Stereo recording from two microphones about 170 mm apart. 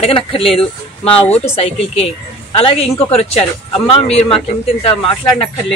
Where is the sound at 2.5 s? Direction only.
35° left (ahead or behind).